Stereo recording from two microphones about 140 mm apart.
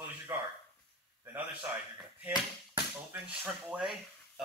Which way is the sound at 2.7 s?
15° right (ahead or behind).